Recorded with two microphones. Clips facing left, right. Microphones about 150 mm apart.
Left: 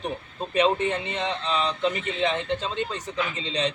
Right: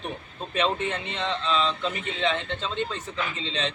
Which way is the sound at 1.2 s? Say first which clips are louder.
Right 2 dB; 15° left (ahead or behind).